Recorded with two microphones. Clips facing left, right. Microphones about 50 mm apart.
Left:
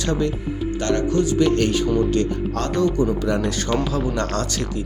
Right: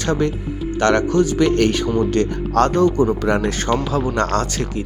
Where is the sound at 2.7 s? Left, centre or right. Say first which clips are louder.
Even; right.